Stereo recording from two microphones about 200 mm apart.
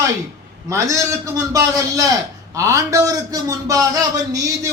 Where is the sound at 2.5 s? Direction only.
15° right (ahead or behind).